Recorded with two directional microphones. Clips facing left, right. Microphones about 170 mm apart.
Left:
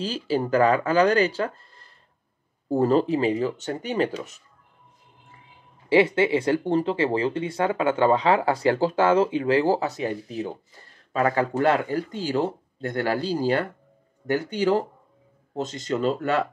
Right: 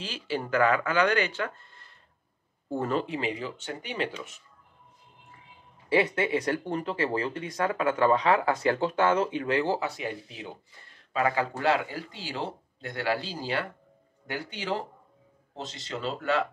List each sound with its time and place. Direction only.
0.0 s speech: 35° left (ahead or behind)
5.9 s speech: 25° left (ahead or behind); by 16.4 s 45° left (ahead or behind)